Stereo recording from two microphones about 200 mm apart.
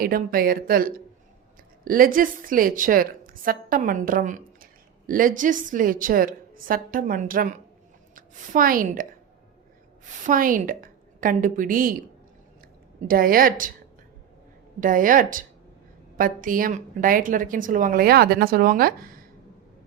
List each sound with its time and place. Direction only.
0.0 s a woman's voice: 45° right (ahead or behind)
10.2 s a woman's voice: 45° right (ahead or behind)
14.8 s a woman's voice: 40° right (ahead or behind)